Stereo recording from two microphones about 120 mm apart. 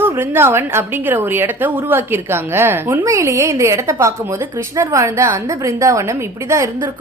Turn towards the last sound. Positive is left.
turn(degrees=-25)  # may be behind; listen again after turning